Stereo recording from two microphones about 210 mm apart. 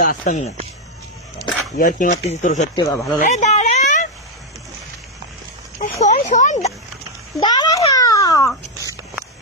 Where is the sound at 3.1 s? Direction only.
35° left (ahead or behind).